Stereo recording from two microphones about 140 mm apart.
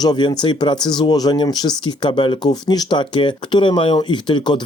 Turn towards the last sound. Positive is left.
turn(degrees=35)  # may be behind; listen again after turning